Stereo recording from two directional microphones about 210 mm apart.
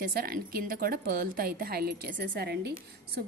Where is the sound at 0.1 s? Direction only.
45° right (ahead or behind).